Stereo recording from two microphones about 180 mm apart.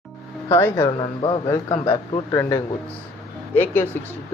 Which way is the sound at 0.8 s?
25° left (ahead or behind).